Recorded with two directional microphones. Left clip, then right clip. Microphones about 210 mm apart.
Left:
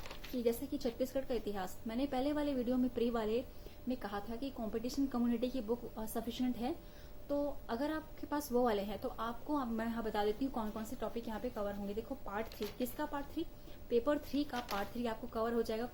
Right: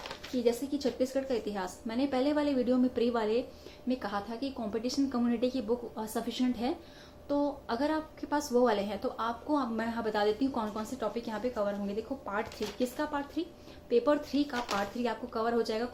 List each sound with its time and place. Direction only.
0.4 s a woman's voice: 50° left (ahead or behind)
12.6 s speech: 20° left (ahead or behind)
13.0 s a woman's voice: 50° left (ahead or behind)